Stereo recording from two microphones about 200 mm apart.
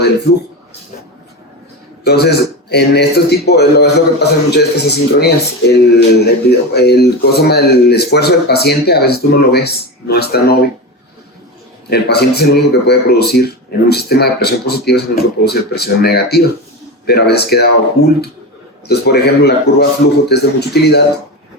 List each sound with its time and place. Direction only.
2.0 s a man's voice: 55° left (ahead or behind)
11.9 s a man's voice: 55° left (ahead or behind)